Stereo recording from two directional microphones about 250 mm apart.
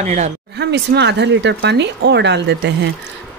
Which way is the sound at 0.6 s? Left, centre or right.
Right.